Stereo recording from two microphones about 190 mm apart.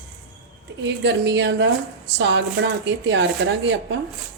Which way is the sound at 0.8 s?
65° right (ahead or behind).